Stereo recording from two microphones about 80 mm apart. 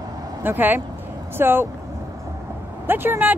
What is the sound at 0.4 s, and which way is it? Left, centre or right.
Speech, right.